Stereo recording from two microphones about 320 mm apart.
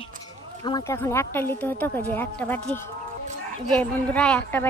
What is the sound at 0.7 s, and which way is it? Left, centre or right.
Speech, centre.